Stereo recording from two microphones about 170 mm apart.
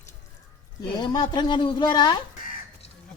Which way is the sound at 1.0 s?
25° left (ahead or behind).